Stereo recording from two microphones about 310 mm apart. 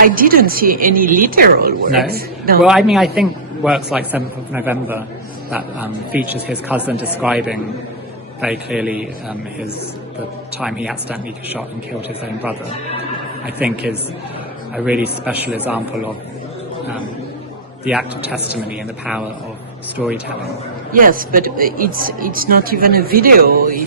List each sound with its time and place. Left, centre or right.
0.0 s speech: right
2.6 s a man's voice: centre
14.8 s a man's voice: centre
17.8 s a man's voice: centre
20.0 s a man's voice: centre
20.9 s speech: right